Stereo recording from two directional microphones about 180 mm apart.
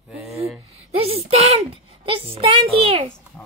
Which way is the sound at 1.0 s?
35° right (ahead or behind).